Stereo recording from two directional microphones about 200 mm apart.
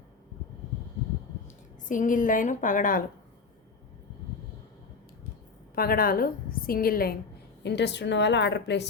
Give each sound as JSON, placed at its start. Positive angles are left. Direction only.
{"t": 1.9, "sound": "a woman's voice", "side_deg": 40}
{"t": 5.7, "sound": "a woman's voice", "side_deg": 50}
{"t": 7.6, "sound": "a woman's voice", "side_deg": 60}